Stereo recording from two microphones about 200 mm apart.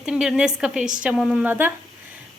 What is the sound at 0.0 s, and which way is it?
Speech, 5° right (ahead or behind).